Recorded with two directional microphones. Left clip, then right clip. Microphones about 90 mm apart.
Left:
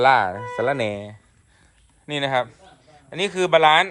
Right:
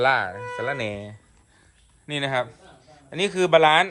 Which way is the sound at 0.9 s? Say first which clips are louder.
Left 4 dB; 25° right (ahead or behind).